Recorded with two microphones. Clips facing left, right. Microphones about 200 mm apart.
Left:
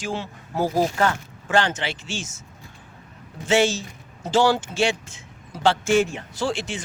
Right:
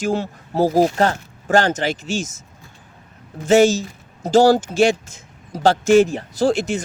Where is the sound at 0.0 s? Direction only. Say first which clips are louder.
Right 8 dB; 40° right (ahead or behind).